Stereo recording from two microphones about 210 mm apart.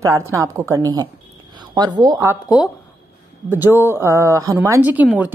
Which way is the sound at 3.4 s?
10° right (ahead or behind).